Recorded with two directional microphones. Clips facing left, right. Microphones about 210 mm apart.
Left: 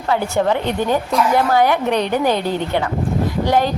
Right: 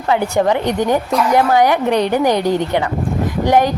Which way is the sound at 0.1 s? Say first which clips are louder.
Right 2 dB; 15° right (ahead or behind).